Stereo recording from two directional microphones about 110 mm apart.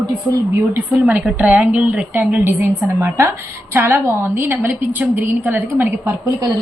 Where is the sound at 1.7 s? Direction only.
10° right (ahead or behind).